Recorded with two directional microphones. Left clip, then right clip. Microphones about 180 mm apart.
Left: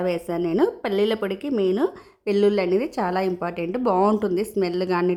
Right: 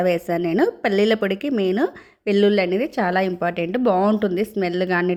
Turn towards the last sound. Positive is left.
turn(degrees=-5)  # may be behind; listen again after turning